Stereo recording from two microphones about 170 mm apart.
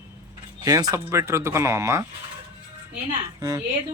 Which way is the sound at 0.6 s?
20° right (ahead or behind).